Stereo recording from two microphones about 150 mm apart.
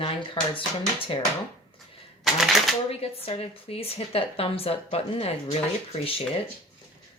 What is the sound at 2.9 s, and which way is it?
A woman's voice, 40° left (ahead or behind).